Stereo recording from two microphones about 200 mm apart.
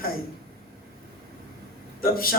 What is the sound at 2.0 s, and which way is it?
Speech, 45° left (ahead or behind).